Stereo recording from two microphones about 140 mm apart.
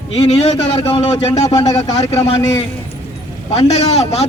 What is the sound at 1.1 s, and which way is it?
Speech, 55° left (ahead or behind).